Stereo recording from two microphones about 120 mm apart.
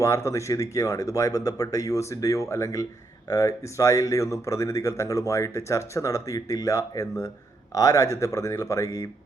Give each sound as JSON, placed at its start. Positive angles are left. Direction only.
{"t": 0.0, "sound": "speech", "side_deg": 25}